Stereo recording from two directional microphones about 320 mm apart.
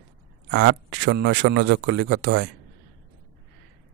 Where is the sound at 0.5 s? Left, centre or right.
Right.